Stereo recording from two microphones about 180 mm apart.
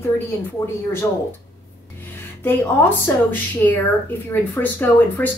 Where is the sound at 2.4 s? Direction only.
10° left (ahead or behind).